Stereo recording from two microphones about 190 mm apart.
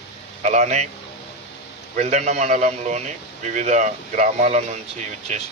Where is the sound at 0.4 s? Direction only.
35° right (ahead or behind).